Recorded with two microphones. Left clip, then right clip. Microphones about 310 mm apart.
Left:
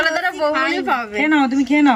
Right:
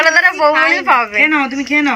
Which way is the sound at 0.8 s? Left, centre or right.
Right.